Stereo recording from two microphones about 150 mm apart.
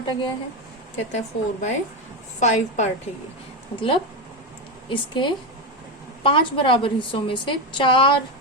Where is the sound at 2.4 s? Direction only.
50° left (ahead or behind).